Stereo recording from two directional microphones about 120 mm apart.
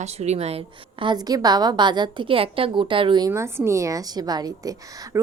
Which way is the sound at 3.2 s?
20° right (ahead or behind).